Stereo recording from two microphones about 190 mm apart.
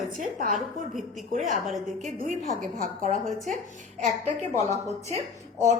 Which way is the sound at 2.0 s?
40° right (ahead or behind).